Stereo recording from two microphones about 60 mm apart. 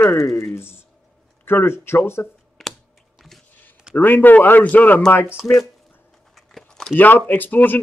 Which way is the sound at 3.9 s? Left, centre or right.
Left.